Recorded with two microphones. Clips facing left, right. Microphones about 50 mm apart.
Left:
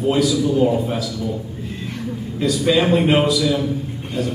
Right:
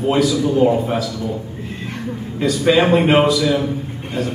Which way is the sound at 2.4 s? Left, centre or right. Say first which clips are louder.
Right 2 dB; centre.